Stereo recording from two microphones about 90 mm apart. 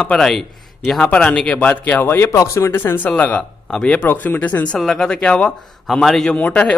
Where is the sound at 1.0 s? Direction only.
15° left (ahead or behind).